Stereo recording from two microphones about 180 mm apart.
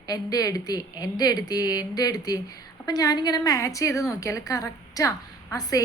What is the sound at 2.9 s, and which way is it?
A woman's voice, 20° left (ahead or behind).